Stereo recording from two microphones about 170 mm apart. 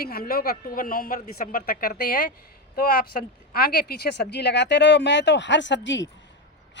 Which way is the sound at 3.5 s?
60° left (ahead or behind).